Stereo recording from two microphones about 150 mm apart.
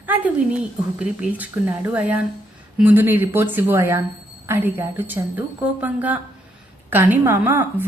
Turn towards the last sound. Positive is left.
turn(degrees=-15)  # may be behind; listen again after turning